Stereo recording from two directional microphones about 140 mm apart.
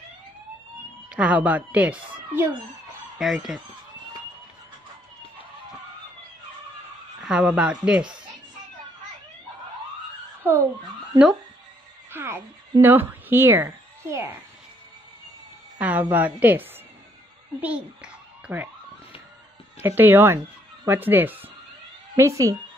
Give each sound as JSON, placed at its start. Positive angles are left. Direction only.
{"t": 1.1, "sound": "speech", "side_deg": -10}
{"t": 3.2, "sound": "speech", "side_deg": 0}
{"t": 7.2, "sound": "speech", "side_deg": -5}
{"t": 12.1, "sound": "a sound", "side_deg": -15}
{"t": 12.8, "sound": "a woman's voice", "side_deg": -15}
{"t": 15.8, "sound": "a child's voice", "side_deg": -10}
{"t": 19.8, "sound": "speech", "side_deg": -15}